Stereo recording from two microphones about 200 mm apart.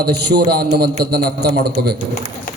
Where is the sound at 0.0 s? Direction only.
55° right (ahead or behind).